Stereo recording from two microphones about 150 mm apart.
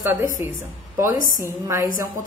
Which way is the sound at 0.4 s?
40° left (ahead or behind).